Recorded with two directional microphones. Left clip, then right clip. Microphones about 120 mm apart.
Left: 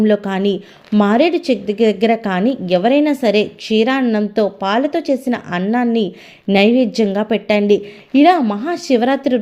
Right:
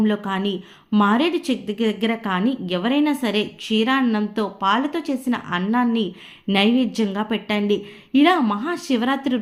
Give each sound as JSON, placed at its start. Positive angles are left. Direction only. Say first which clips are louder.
{"t": 0.0, "sound": "a woman's voice", "louder": "left 7 dB", "side_deg": 25}